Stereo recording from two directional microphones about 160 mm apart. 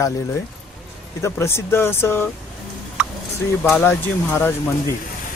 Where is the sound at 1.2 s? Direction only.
15° left (ahead or behind).